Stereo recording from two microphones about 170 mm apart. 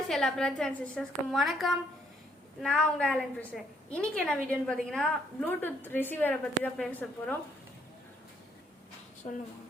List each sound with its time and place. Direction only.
0.1 s a woman's voice: 5° left (ahead or behind)
9.2 s speech: 35° left (ahead or behind)